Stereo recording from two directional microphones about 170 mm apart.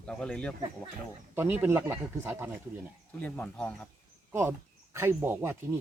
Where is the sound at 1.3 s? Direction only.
15° right (ahead or behind).